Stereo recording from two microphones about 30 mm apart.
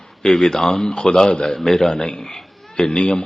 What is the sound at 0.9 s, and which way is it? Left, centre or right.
Speech, left.